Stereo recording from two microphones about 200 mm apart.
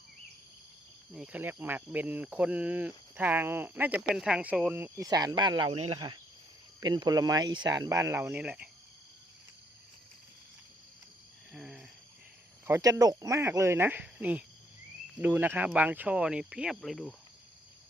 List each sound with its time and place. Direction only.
1.1 s speech: 5° right (ahead or behind)
11.5 s a sound: centre (ahead or behind)
12.6 s speech: 15° right (ahead or behind); by 17.2 s centre (ahead or behind)